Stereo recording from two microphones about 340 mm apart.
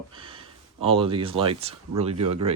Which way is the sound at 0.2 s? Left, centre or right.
Centre.